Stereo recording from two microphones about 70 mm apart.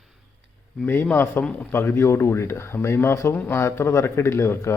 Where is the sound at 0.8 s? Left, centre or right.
Left.